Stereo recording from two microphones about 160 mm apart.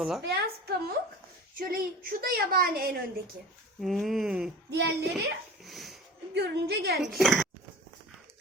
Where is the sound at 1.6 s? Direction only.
65° right (ahead or behind).